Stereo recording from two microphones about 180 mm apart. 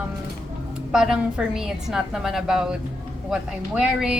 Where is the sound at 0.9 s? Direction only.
5° right (ahead or behind).